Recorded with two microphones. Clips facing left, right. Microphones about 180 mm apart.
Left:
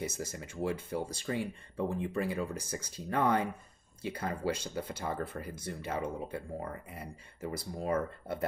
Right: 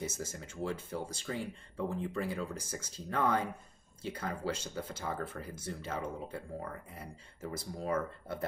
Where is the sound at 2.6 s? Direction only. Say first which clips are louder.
Left 3 dB; 60° left (ahead or behind).